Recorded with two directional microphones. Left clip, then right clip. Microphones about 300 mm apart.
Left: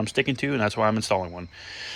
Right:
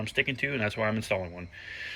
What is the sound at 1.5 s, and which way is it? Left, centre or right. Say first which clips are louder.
Speech: left 2 dB; centre.